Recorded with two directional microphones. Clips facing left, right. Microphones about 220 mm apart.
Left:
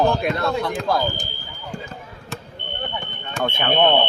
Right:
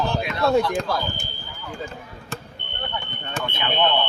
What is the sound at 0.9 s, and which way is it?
Speech, 50° left (ahead or behind).